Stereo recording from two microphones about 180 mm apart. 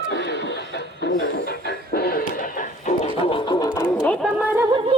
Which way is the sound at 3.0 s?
30° left (ahead or behind).